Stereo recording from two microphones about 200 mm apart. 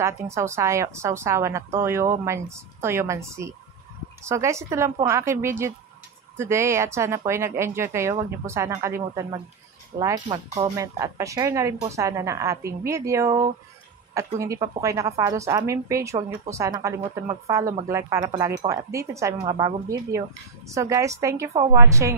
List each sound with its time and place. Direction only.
0.0 s a woman's voice: 15° right (ahead or behind)
10.2 s speech: 35° right (ahead or behind)
10.6 s a woman's voice: 15° right (ahead or behind)